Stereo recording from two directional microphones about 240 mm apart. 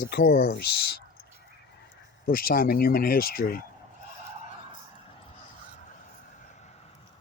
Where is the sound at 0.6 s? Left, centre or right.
Left.